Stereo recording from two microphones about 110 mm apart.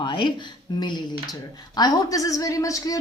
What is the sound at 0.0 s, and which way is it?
Speech, 45° left (ahead or behind).